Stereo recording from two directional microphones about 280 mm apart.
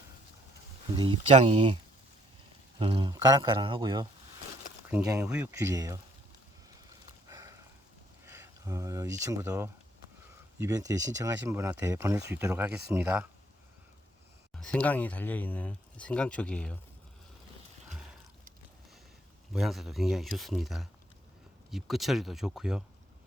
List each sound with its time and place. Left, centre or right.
0.9 s speech: centre
7.0 s a sound: centre
8.2 s speech: centre
14.5 s speech: centre
19.5 s speech: centre